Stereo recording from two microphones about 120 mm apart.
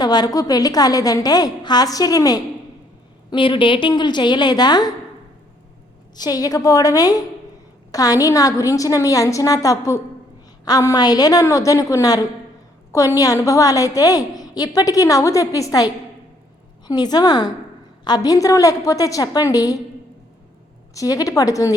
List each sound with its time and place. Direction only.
0.0 s a woman's voice: 35° left (ahead or behind)
3.2 s a woman's voice: 45° left (ahead or behind)
6.1 s a woman's voice: 30° left (ahead or behind)
20.9 s a woman's voice: 30° left (ahead or behind)